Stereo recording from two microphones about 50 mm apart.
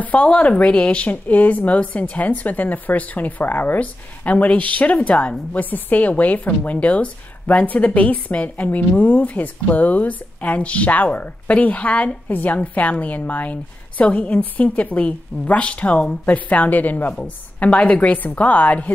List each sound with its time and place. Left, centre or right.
0.0 s a woman's voice: left
18.1 s speech: left